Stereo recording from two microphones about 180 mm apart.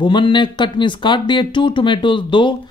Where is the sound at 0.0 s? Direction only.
25° left (ahead or behind).